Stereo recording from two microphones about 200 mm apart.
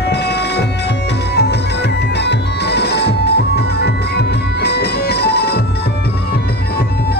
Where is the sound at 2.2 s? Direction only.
55° left (ahead or behind).